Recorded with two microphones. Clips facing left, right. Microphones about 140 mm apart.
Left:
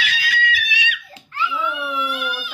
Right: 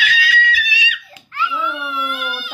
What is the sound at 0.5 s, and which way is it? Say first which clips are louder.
Screaming: right 2 dB; 55° left (ahead or behind).